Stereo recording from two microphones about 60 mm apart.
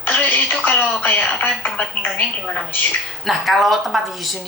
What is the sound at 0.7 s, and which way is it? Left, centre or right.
A woman's voice, left.